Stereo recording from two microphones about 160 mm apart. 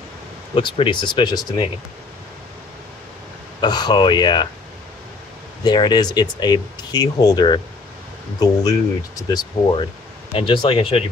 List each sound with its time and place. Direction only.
0.6 s speech: 30° left (ahead or behind)
3.6 s speech: 25° left (ahead or behind)
5.6 s speech: 25° left (ahead or behind)